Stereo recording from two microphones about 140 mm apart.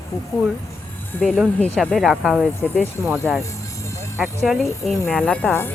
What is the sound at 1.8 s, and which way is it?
Speech, centre (ahead or behind).